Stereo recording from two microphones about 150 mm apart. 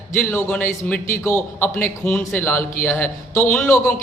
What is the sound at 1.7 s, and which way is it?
A man's voice, 5° left (ahead or behind).